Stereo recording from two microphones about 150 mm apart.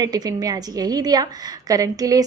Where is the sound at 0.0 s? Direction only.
25° right (ahead or behind).